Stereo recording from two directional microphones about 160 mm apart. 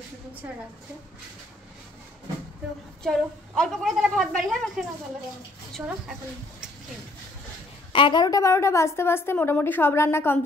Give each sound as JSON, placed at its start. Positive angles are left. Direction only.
{"t": 3.0, "sound": "a woman's voice", "side_deg": 5}
{"t": 7.9, "sound": "a woman's voice", "side_deg": 30}